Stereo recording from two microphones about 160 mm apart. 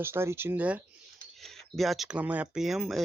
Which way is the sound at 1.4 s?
Centre (ahead or behind).